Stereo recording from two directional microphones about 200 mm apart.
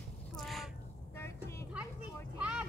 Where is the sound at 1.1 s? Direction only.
15° left (ahead or behind).